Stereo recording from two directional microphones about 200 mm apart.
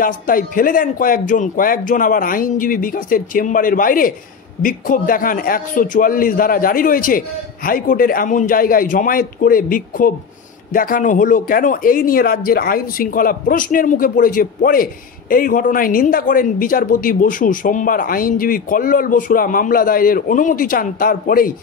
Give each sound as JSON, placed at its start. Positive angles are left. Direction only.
{"t": 0.0, "sound": "speech", "side_deg": 45}